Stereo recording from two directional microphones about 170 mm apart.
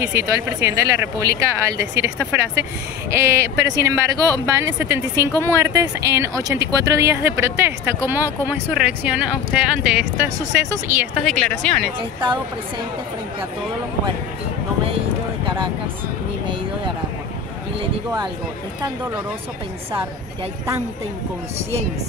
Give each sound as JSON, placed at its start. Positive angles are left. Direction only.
{"t": 0.0, "sound": "speech", "side_deg": -15}
{"t": 11.2, "sound": "speech", "side_deg": 5}